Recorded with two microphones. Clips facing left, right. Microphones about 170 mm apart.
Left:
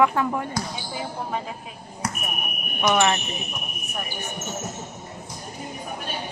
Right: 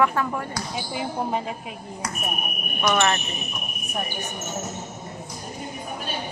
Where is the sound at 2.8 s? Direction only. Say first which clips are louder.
Left 1 dB; 15° left (ahead or behind).